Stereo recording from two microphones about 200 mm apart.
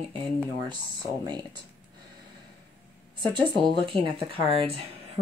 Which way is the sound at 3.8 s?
25° right (ahead or behind).